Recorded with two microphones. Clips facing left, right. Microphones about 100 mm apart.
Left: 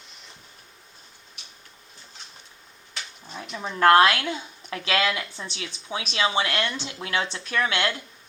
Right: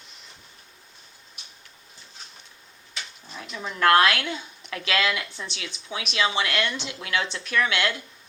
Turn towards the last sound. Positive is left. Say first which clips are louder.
# even
turn(degrees=30)  # may be behind; listen again after turning